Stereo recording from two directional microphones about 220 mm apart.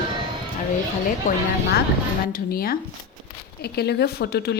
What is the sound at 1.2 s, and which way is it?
A woman's voice, 35° left (ahead or behind).